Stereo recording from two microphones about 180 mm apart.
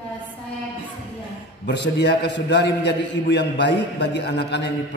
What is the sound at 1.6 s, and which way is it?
A man's voice, 75° left (ahead or behind).